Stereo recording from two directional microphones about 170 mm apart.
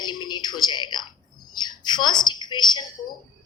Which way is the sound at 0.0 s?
25° left (ahead or behind).